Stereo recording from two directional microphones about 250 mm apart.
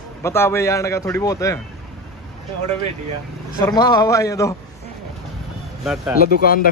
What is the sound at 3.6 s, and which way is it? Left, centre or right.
Speech, centre.